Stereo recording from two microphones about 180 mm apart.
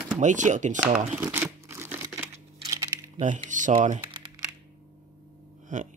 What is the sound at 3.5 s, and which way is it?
Speech, 45° right (ahead or behind).